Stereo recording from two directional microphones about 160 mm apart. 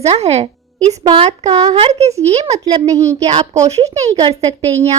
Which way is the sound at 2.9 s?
20° right (ahead or behind).